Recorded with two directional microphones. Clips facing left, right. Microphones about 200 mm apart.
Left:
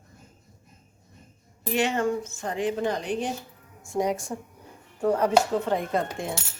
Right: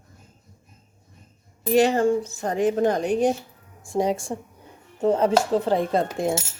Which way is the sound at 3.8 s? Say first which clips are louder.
Right 3 dB; 30° right (ahead or behind).